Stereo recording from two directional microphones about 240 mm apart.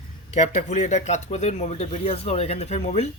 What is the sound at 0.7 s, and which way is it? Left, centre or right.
Speech, left.